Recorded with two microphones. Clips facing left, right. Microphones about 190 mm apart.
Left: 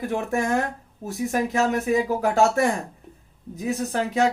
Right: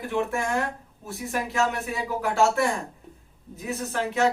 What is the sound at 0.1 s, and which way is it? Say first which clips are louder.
Speech: left 1 dB; 40° left (ahead or behind).